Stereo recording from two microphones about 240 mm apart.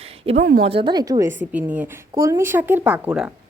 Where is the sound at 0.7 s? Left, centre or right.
Centre.